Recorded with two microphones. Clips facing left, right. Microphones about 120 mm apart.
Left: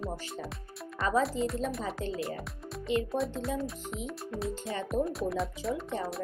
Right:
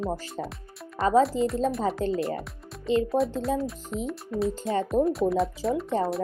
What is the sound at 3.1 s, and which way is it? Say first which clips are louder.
Speech: right 6 dB; centre (ahead or behind).